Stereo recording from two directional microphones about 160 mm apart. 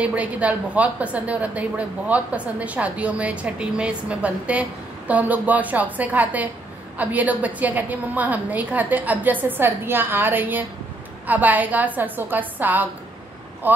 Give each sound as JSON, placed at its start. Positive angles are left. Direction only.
{"t": 0.0, "sound": "a woman's voice", "side_deg": -10}